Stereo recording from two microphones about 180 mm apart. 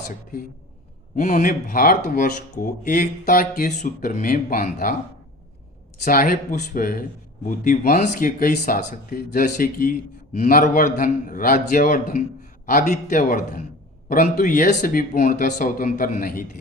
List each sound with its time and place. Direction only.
1.1 s speech: 50° left (ahead or behind)
6.1 s speech: 50° left (ahead or behind)